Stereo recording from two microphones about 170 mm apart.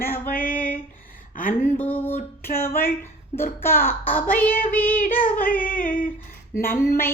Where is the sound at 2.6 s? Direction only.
15° left (ahead or behind).